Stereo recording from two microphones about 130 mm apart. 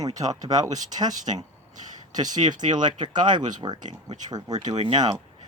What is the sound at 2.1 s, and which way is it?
Speech, 30° right (ahead or behind).